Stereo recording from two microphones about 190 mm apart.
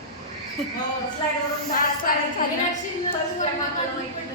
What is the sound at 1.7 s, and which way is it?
Speech, 45° left (ahead or behind).